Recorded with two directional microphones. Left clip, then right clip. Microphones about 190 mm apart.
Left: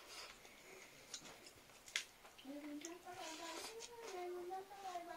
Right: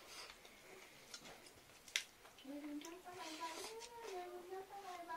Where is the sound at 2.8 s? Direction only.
10° left (ahead or behind).